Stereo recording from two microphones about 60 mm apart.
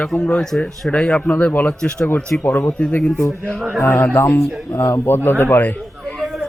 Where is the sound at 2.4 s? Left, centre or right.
Left.